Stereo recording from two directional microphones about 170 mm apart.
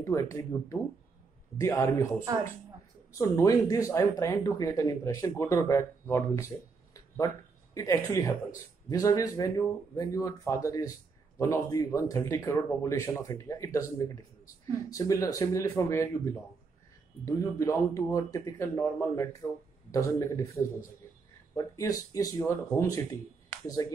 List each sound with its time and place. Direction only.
0.0 s speech: 20° left (ahead or behind)
2.1 s speech: 15° right (ahead or behind)
3.1 s speech: 20° left (ahead or behind)